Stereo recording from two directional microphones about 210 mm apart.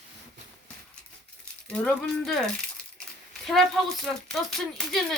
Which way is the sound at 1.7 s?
5° left (ahead or behind).